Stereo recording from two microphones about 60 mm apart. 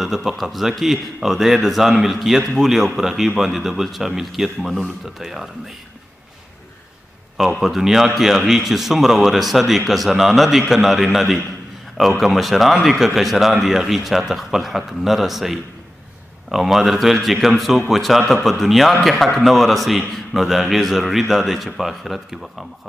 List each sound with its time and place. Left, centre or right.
0.0 s speech: centre
7.3 s speech: centre